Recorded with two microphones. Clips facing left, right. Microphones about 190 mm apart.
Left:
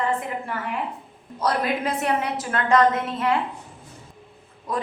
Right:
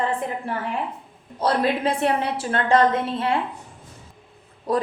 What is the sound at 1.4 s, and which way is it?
A woman's voice, 30° right (ahead or behind).